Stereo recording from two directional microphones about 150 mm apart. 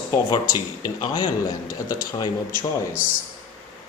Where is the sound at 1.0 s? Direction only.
25° left (ahead or behind).